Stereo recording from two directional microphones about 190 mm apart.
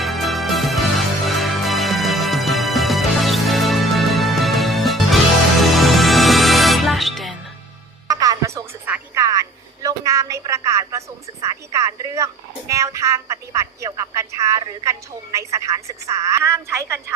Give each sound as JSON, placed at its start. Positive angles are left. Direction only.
{"t": 0.0, "sound": "music", "side_deg": 0}
{"t": 8.0, "sound": "music", "side_deg": -20}